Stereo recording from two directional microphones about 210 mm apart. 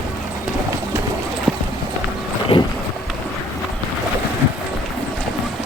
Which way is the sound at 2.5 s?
25° left (ahead or behind).